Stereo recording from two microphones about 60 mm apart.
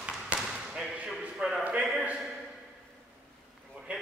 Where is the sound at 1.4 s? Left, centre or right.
Centre.